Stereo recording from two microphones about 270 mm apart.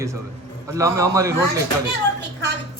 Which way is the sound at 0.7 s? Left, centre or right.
Centre.